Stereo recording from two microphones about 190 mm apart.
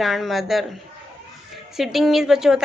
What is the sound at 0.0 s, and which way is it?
A woman's voice, centre (ahead or behind).